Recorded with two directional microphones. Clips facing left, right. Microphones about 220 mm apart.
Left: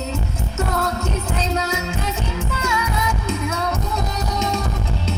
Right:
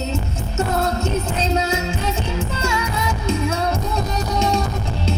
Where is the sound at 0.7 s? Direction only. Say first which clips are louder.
Right 4 dB; 25° right (ahead or behind).